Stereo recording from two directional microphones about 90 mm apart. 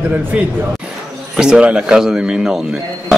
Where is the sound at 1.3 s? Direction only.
10° right (ahead or behind).